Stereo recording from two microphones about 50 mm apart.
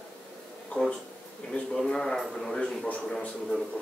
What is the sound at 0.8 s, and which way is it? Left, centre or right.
A man's voice, left.